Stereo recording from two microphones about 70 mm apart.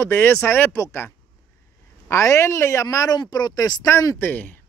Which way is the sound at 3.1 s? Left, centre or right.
Left.